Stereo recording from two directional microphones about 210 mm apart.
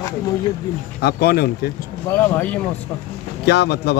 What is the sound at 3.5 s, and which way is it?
Speech, 50° left (ahead or behind).